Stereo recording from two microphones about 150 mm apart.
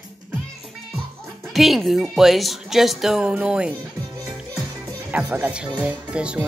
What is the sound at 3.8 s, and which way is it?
Music, 25° right (ahead or behind).